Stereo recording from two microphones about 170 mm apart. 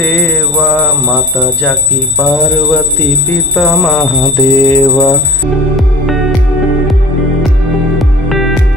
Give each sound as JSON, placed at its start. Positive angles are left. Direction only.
{"t": 0.0, "sound": "alarm clock", "side_deg": 10}
{"t": 0.6, "sound": "speech", "side_deg": 0}
{"t": 3.3, "sound": "alarm clock", "side_deg": 5}
{"t": 4.4, "sound": "mantra", "side_deg": 20}
{"t": 4.9, "sound": "speech", "side_deg": 5}
{"t": 5.8, "sound": "music", "side_deg": 0}
{"t": 8.0, "sound": "music", "side_deg": 0}